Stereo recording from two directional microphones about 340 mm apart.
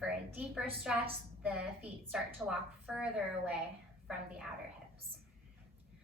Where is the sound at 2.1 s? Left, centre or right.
Centre.